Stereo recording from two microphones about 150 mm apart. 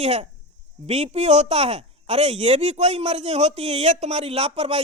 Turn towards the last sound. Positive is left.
turn(degrees=-45)  # may be behind; listen again after turning